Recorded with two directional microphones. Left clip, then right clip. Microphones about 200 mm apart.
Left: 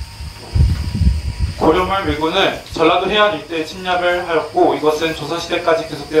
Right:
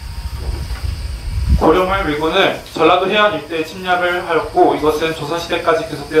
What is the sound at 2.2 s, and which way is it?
A man's voice, 25° left (ahead or behind).